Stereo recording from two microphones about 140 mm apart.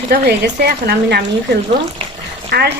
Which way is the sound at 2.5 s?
90° right.